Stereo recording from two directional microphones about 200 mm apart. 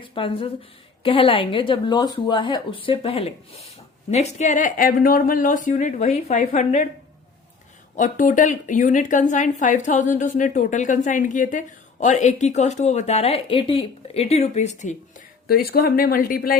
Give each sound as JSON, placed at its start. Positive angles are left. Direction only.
{"t": 0.0, "sound": "a woman's voice", "side_deg": 25}
{"t": 7.9, "sound": "a woman's voice", "side_deg": 40}
{"t": 15.4, "sound": "speech", "side_deg": 50}